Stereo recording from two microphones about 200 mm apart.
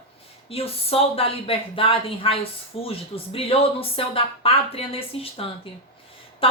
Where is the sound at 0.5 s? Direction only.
30° left (ahead or behind).